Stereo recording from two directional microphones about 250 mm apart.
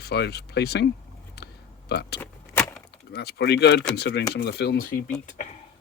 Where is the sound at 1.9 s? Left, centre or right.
Left.